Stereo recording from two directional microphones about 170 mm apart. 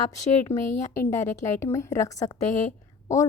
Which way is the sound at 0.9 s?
15° left (ahead or behind).